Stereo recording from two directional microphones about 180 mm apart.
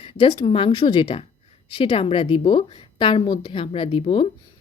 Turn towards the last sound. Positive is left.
turn(degrees=30)  # may be behind; listen again after turning